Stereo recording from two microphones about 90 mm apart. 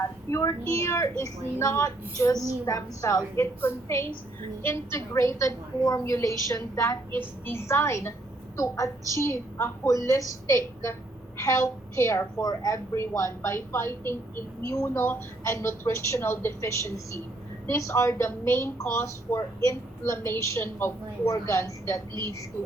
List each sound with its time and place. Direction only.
0.3 s a woman's voice: 30° left (ahead or behind)
7.1 s a woman's voice: 20° left (ahead or behind)